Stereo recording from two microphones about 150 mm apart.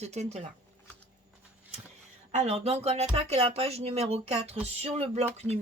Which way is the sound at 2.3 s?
45° right (ahead or behind).